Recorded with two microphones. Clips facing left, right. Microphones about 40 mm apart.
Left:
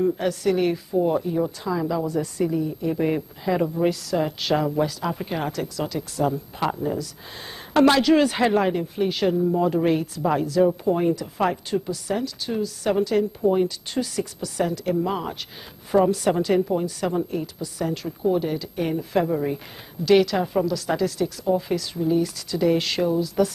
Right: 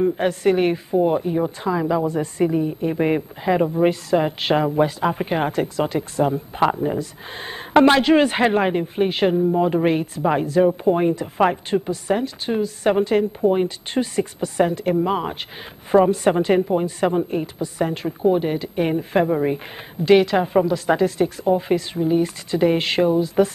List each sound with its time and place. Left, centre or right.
0.0 s speech: right